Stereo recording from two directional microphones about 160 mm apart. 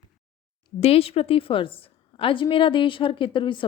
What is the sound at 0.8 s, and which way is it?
Speech, 40° left (ahead or behind).